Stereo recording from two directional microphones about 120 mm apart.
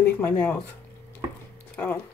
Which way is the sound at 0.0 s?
15° left (ahead or behind).